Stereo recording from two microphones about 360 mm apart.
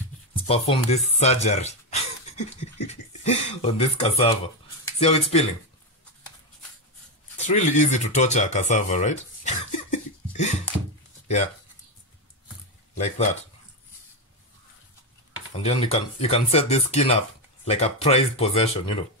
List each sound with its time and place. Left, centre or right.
0.3 s speech: centre
7.3 s speech: centre
12.9 s speech: centre
15.5 s speech: centre